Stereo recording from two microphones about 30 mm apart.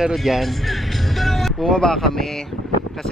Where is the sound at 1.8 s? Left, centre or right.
Centre.